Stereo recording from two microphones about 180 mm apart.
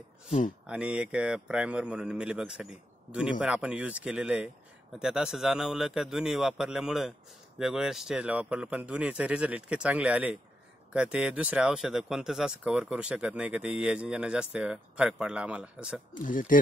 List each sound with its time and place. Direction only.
0.7 s speech: 5° right (ahead or behind)
16.2 s speech: 50° left (ahead or behind)